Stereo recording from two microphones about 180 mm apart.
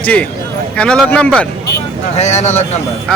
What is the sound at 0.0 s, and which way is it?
Speech, 10° left (ahead or behind).